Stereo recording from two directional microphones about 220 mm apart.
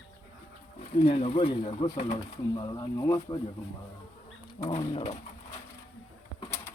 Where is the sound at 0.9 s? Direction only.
25° left (ahead or behind).